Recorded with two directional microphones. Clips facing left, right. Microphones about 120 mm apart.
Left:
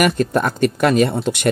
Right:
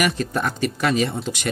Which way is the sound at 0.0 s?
50° left (ahead or behind).